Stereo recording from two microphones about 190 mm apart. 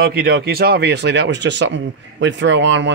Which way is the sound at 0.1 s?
50° right (ahead or behind).